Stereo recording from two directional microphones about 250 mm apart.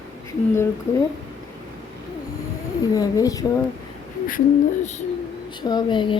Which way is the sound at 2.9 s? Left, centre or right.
Centre.